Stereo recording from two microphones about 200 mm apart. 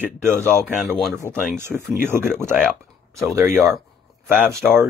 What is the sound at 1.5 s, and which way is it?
Speech, 10° right (ahead or behind).